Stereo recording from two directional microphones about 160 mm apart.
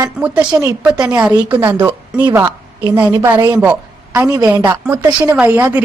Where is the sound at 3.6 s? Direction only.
10° right (ahead or behind).